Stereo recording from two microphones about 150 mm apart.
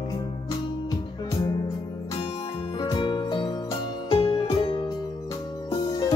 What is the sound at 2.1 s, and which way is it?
Music, 35° left (ahead or behind).